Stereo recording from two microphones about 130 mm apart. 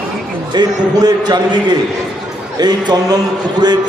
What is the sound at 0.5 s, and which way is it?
A man's voice, 35° right (ahead or behind).